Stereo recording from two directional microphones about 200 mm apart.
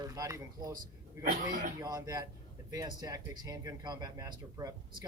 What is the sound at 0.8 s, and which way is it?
Speech, 40° right (ahead or behind).